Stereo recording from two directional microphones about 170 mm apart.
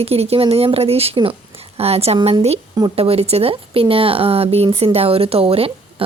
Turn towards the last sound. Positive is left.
turn(degrees=-35)  # may be behind; listen again after turning